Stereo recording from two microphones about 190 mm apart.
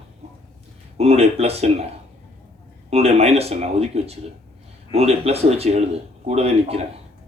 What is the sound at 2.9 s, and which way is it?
Speech, 35° right (ahead or behind).